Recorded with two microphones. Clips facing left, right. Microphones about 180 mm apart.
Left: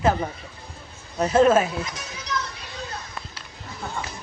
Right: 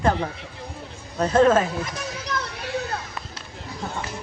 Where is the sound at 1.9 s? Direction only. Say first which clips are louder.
Right 2 dB; 55° right (ahead or behind).